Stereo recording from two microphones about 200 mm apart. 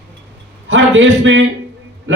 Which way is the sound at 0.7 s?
70° right (ahead or behind).